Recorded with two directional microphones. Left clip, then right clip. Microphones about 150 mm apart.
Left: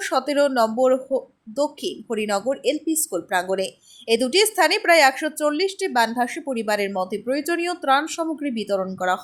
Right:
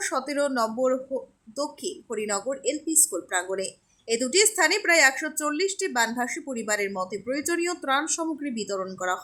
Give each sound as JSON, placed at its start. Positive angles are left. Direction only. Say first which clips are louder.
{"t": 0.0, "sound": "speech", "louder": "left 6 dB", "side_deg": 20}